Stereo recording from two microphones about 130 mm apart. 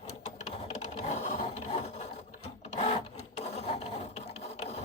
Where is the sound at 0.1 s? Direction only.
60° left (ahead or behind).